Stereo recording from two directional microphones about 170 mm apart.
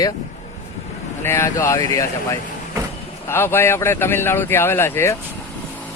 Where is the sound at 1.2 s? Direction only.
15° left (ahead or behind).